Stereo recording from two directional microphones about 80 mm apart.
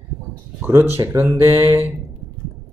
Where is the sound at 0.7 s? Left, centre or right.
Right.